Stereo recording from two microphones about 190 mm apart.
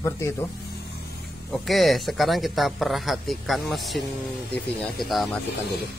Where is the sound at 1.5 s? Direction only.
Centre (ahead or behind).